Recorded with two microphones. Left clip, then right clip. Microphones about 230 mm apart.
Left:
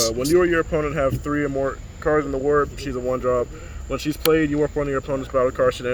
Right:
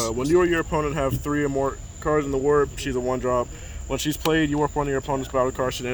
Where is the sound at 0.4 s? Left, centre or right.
Right.